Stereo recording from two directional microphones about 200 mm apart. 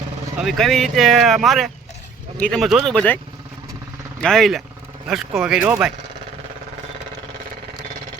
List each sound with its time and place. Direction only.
0.3 s speech: centre (ahead or behind)
4.2 s speech: centre (ahead or behind)